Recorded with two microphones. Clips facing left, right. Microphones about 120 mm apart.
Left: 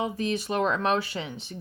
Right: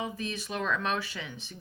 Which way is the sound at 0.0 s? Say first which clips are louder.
Left 7 dB; 30° left (ahead or behind).